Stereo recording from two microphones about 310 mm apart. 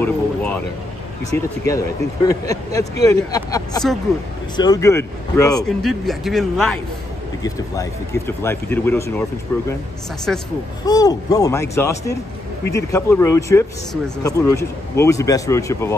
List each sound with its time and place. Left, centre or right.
0.0 s speech: centre
10.9 s speech: centre